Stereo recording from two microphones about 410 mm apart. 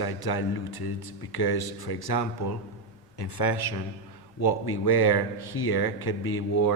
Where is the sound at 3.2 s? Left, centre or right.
Left.